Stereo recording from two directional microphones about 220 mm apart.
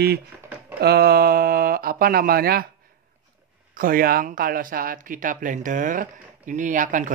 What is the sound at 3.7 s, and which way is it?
Speech, 40° right (ahead or behind).